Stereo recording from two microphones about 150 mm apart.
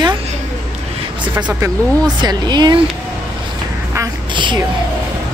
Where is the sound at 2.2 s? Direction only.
30° right (ahead or behind).